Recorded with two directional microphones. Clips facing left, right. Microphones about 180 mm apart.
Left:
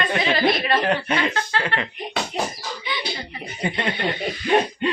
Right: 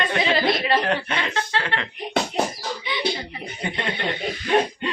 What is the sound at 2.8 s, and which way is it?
Chicken, 20° right (ahead or behind).